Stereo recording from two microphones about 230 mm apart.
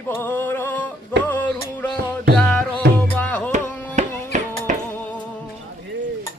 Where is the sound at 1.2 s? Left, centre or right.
Centre.